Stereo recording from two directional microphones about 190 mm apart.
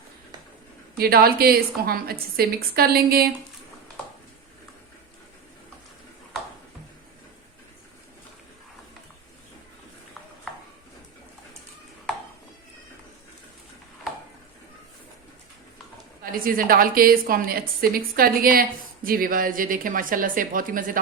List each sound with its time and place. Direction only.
0.9 s a woman's voice: 55° right (ahead or behind)
16.5 s a woman's voice: 50° right (ahead or behind)